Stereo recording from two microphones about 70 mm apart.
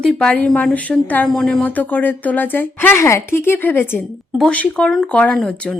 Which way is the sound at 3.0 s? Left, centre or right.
Left.